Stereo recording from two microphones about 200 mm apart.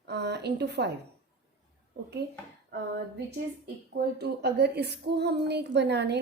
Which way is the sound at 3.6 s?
55° right (ahead or behind).